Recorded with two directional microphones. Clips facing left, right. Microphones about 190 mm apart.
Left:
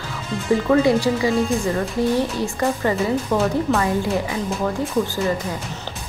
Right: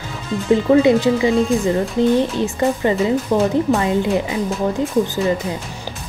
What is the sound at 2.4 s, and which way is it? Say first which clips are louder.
Speech: right 3 dB; 20° right (ahead or behind).